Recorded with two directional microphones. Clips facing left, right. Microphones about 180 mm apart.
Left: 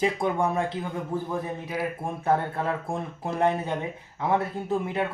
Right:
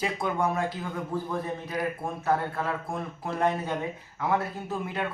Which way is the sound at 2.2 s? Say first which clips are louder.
Left 3 dB; 25° left (ahead or behind).